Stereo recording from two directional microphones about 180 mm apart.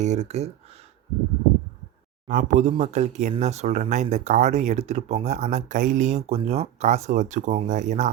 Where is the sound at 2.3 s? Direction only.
45° right (ahead or behind).